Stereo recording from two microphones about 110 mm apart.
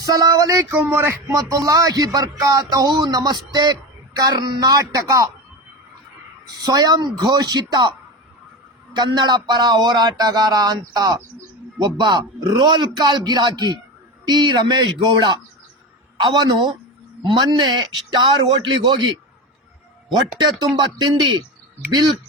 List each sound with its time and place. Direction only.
0.0 s speech: 35° right (ahead or behind)
0.7 s speech: 20° right (ahead or behind)
6.6 s a man's voice: 35° right (ahead or behind)
20.4 s a man's voice: 40° right (ahead or behind)